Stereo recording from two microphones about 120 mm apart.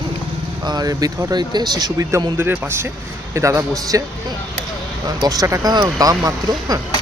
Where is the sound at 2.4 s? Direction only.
15° right (ahead or behind).